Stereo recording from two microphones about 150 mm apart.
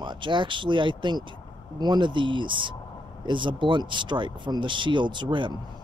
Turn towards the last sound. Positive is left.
turn(degrees=-30)  # may be behind; listen again after turning